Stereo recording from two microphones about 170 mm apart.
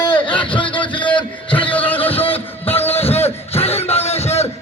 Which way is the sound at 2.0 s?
35° left (ahead or behind).